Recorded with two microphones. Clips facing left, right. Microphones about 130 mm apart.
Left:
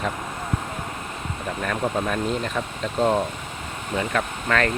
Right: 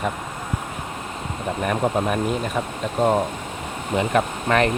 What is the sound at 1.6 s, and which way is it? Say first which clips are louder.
Speech: right 3 dB; 20° right (ahead or behind).